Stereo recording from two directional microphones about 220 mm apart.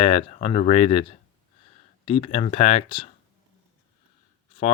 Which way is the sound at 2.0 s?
25° left (ahead or behind).